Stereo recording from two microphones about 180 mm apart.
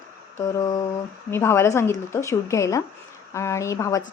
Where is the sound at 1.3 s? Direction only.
15° left (ahead or behind).